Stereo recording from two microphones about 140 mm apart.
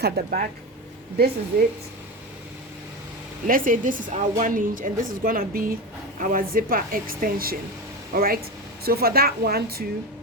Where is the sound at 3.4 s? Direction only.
75° right (ahead or behind); by 9.8 s 90° right.